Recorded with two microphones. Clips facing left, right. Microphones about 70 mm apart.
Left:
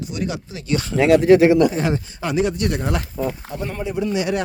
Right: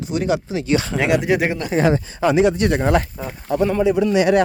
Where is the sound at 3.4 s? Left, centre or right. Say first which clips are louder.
Right 10 dB; right.